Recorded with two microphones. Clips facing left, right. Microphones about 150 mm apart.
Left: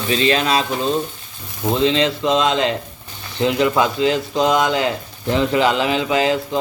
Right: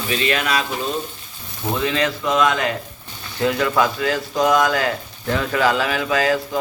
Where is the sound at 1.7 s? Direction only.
25° left (ahead or behind).